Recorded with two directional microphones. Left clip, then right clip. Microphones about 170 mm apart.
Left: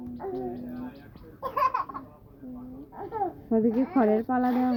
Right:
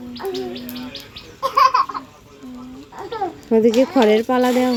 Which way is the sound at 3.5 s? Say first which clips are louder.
Right 12 dB; 25° right (ahead or behind).